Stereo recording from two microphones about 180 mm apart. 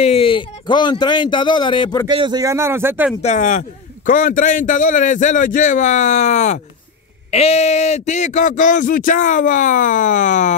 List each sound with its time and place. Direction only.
0.0 s speech: 30° left (ahead or behind)
2.0 s speech: 25° right (ahead or behind)
3.2 s a man's voice: 40° left (ahead or behind)